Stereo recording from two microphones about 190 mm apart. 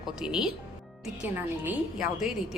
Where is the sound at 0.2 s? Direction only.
5° right (ahead or behind).